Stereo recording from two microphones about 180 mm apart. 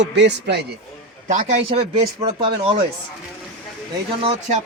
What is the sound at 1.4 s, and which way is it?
A man's voice, 30° right (ahead or behind).